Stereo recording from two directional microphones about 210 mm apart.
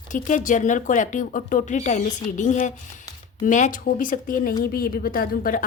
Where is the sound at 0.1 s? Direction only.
40° left (ahead or behind).